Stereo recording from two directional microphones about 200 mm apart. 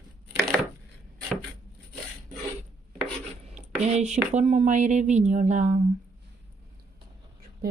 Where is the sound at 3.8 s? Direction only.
35° right (ahead or behind).